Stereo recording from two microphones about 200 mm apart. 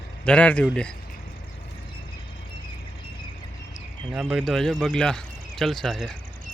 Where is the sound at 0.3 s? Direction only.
5° left (ahead or behind).